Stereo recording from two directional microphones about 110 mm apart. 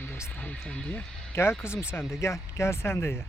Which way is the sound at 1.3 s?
25° left (ahead or behind).